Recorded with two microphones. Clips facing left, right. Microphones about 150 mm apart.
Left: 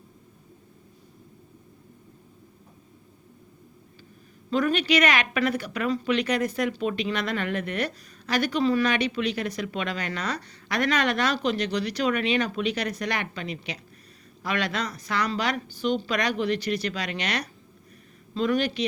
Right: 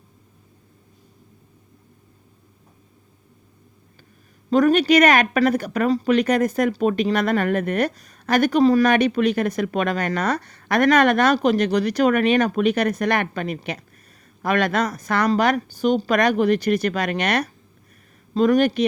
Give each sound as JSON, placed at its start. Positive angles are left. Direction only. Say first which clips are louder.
{"t": 4.4, "sound": "a woman's voice", "louder": "right 8 dB", "side_deg": -45}